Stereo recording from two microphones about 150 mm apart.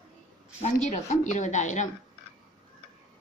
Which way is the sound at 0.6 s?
50° left (ahead or behind).